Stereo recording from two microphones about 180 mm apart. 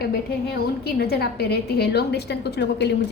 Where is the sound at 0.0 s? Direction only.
60° left (ahead or behind).